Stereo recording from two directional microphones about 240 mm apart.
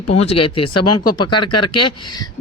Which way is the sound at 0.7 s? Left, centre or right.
Left.